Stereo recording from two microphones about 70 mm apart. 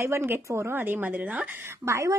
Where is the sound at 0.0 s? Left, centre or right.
Right.